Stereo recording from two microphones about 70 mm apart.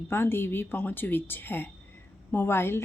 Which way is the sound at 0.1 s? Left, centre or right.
Left.